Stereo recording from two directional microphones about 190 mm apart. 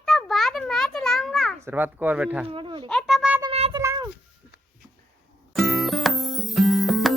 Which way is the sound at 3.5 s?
35° right (ahead or behind).